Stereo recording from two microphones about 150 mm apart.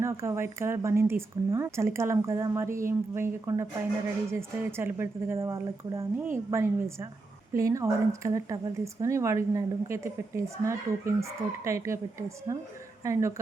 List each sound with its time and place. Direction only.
0.0 s a woman's voice: 20° right (ahead or behind)